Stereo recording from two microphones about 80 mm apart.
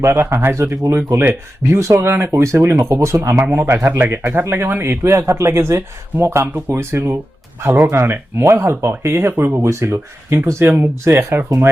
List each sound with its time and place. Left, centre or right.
0.2 s speech: right